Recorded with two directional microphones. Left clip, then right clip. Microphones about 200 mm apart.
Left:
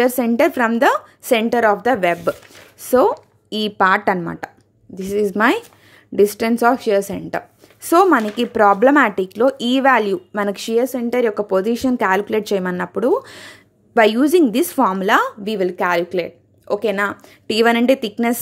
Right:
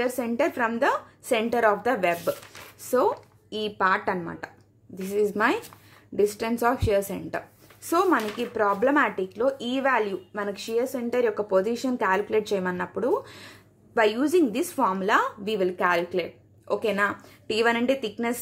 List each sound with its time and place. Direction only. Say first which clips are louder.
0.0 s speech: left 10 dB; 45° left (ahead or behind)